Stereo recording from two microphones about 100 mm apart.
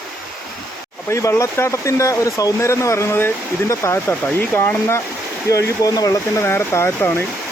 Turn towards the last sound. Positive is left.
turn(degrees=20)  # may be behind; listen again after turning